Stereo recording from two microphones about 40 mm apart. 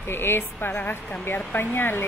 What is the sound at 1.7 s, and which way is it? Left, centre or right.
Speech, left.